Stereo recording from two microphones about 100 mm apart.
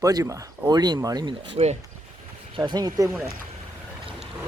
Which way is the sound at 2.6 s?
45° right (ahead or behind).